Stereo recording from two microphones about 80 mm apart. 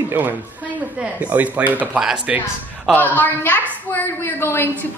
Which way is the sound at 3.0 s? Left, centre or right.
Left.